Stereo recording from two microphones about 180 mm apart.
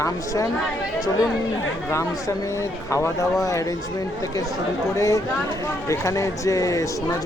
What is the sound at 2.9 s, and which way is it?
Speech, 15° left (ahead or behind).